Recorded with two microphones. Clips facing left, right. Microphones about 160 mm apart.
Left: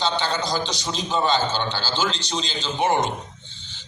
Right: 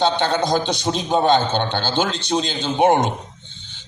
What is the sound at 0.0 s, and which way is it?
A man's voice, 55° right (ahead or behind).